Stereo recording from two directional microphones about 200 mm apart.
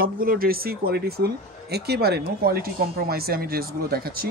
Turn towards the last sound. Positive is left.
turn(degrees=-50)  # may be behind; listen again after turning